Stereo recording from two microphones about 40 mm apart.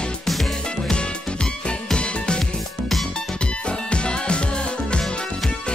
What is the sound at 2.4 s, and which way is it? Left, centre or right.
Music, centre.